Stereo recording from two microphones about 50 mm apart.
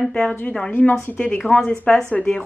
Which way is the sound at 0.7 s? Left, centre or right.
Left.